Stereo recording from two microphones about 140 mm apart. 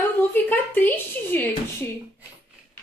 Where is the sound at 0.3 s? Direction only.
15° left (ahead or behind).